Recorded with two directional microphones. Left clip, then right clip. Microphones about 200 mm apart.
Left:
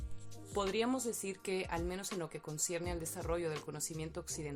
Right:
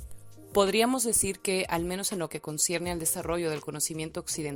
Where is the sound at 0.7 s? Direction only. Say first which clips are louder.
Right 10 dB; 50° right (ahead or behind).